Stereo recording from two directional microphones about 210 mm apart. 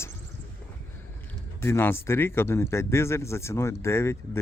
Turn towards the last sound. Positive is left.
turn(degrees=10)  # may be behind; listen again after turning